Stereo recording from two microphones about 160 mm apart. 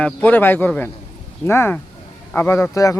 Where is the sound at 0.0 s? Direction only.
10° left (ahead or behind).